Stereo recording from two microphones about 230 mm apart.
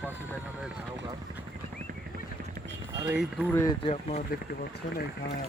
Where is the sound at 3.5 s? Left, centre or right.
Centre.